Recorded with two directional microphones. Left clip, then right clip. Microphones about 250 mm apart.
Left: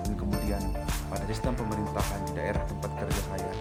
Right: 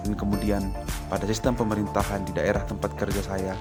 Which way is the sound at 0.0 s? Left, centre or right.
Centre.